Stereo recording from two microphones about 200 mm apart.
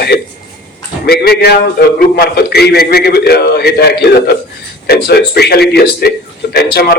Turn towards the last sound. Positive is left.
turn(degrees=50)  # may be behind; listen again after turning